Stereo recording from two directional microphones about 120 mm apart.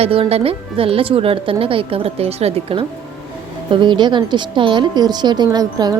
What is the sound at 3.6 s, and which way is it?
A woman's voice, 40° right (ahead or behind).